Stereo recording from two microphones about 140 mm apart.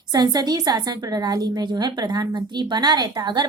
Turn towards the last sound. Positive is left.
turn(degrees=-30)  # may be behind; listen again after turning